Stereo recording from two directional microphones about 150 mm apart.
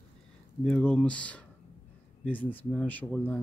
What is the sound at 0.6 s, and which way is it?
Speech, 5° left (ahead or behind).